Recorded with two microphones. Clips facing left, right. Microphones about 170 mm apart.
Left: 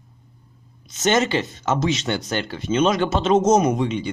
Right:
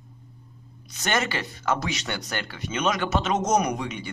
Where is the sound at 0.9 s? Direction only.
20° left (ahead or behind).